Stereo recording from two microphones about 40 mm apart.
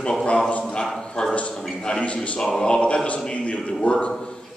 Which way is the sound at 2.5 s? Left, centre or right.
Centre.